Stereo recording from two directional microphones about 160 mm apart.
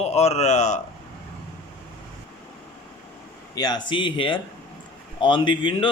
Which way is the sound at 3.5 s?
25° left (ahead or behind).